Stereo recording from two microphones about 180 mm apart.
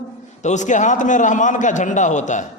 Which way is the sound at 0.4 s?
40° left (ahead or behind).